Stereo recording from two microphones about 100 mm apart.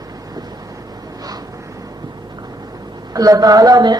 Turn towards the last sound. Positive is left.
turn(degrees=-40)  # may be behind; listen again after turning